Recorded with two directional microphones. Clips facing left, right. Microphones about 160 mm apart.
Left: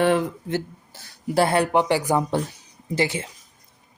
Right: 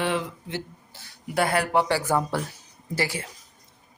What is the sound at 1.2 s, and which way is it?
Speech, 30° left (ahead or behind).